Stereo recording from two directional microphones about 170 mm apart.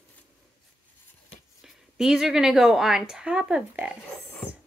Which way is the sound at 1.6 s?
Centre (ahead or behind).